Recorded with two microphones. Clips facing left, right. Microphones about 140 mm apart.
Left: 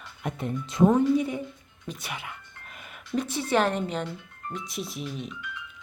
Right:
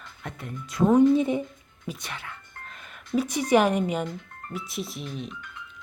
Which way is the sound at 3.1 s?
10° right (ahead or behind).